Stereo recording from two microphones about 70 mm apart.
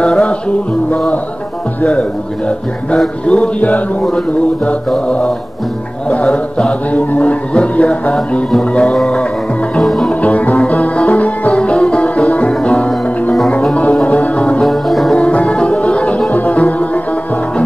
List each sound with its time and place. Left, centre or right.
0.0 s music: centre
1.8 s chant: centre
3.3 s music: centre
4.9 s chant: centre
9.8 s music: centre
10.2 s music: left
14.6 s music: centre
15.1 s music: centre